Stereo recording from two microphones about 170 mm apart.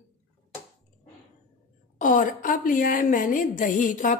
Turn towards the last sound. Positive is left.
turn(degrees=50)  # may be behind; listen again after turning